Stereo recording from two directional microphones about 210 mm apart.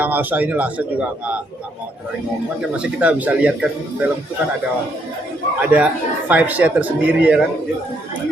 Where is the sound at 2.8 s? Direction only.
5° right (ahead or behind).